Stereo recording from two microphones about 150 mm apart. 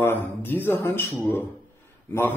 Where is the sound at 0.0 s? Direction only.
15° left (ahead or behind).